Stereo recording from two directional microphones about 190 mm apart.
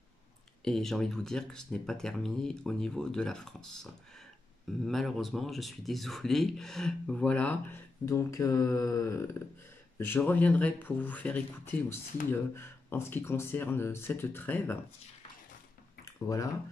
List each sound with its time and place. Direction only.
0.7 s speech: centre (ahead or behind)
16.3 s speech: 15° left (ahead or behind)